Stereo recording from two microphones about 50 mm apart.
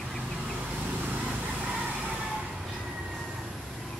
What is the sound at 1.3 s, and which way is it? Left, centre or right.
Vehicle, right.